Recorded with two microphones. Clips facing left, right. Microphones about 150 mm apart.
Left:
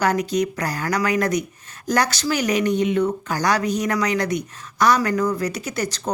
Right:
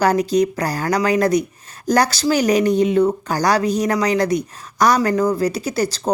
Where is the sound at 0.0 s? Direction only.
35° right (ahead or behind).